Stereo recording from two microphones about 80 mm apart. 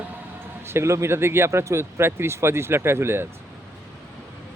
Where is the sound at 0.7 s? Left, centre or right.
Right.